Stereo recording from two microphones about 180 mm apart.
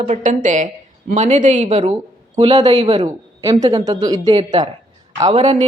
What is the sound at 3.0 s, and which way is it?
A woman's voice, 25° right (ahead or behind).